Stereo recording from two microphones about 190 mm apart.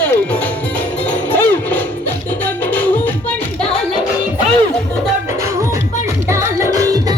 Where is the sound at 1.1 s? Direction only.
10° left (ahead or behind).